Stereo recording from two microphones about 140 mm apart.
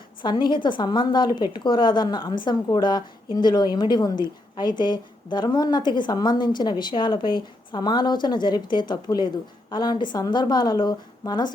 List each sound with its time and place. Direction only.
0.2 s a woman's voice: 35° left (ahead or behind)